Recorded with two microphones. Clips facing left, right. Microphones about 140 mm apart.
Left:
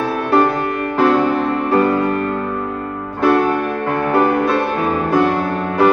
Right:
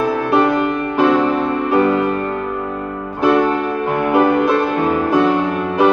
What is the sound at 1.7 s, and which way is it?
Music, 20° right (ahead or behind).